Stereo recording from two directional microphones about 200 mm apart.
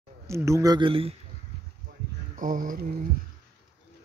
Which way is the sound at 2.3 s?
40° right (ahead or behind).